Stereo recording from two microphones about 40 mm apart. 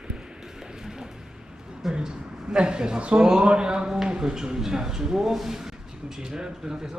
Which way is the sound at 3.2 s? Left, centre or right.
Centre.